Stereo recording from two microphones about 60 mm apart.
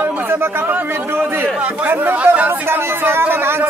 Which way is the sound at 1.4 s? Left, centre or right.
Right.